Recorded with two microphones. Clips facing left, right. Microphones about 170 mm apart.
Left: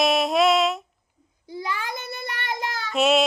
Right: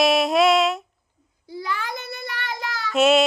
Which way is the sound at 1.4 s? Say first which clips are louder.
Right 1 dB; 20° left (ahead or behind).